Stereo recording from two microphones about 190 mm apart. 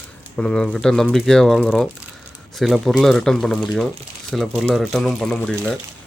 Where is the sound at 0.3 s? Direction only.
5° left (ahead or behind).